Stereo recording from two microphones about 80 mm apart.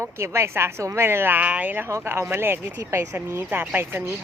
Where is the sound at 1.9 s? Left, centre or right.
Right.